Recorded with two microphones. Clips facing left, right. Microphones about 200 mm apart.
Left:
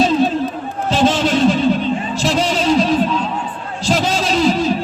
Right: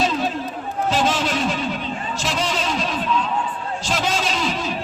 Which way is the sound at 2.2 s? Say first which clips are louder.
Left 8 dB; 30° left (ahead or behind).